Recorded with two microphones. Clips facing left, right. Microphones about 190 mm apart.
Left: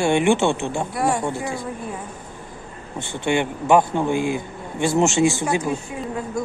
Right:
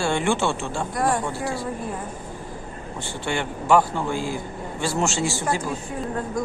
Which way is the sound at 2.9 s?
20° left (ahead or behind).